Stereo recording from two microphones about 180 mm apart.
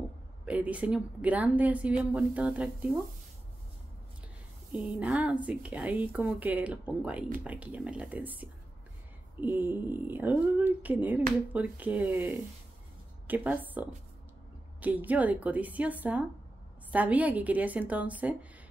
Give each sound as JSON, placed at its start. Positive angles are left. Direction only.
{"t": 0.5, "sound": "speech", "side_deg": -10}
{"t": 4.7, "sound": "speech", "side_deg": -5}
{"t": 13.3, "sound": "speech", "side_deg": -10}